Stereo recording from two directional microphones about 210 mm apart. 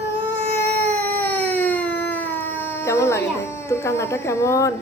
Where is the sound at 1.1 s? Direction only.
5° left (ahead or behind).